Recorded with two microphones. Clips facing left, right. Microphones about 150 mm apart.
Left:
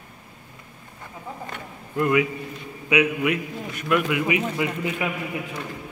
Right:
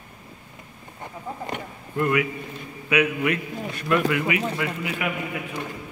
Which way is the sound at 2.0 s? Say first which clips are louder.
Left 2 dB; 15° left (ahead or behind).